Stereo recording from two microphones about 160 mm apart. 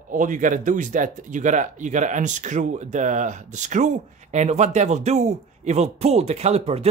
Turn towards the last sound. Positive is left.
turn(degrees=-40)  # may be behind; listen again after turning